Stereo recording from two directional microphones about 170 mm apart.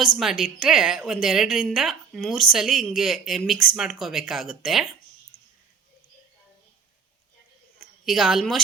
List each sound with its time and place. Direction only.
0.2 s a woman's voice: 5° right (ahead or behind)
5.3 s a sound: 60° left (ahead or behind)
8.0 s a woman's voice: centre (ahead or behind)